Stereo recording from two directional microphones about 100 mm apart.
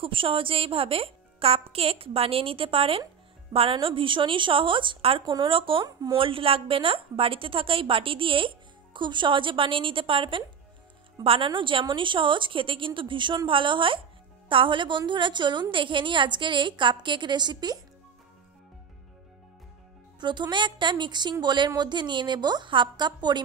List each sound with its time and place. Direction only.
0.0 s a woman's voice: 60° right (ahead or behind); by 17.7 s 45° right (ahead or behind)
20.2 s a woman's voice: 50° right (ahead or behind)